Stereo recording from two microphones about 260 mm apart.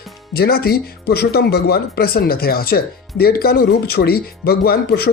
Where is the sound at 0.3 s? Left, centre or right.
Left.